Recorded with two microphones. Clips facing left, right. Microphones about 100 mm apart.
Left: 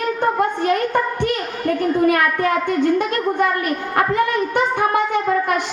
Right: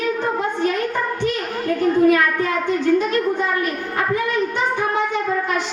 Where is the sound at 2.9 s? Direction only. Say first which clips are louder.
Even; 60° left (ahead or behind).